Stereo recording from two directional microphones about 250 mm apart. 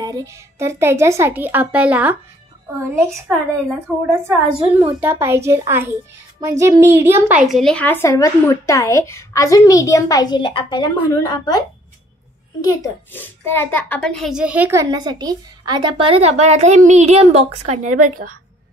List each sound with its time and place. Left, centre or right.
0.0 s a child's voice: centre
3.3 s a child's voice: centre
12.6 s a child's voice: centre; by 18.3 s right